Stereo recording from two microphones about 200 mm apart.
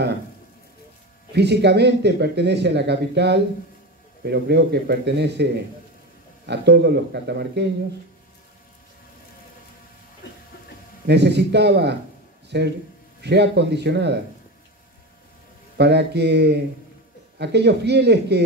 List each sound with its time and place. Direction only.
1.3 s speech: 55° right (ahead or behind)
11.1 s speech: 55° right (ahead or behind)
15.8 s speech: 60° right (ahead or behind)